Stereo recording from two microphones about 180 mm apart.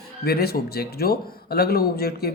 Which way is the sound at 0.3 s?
60° left (ahead or behind).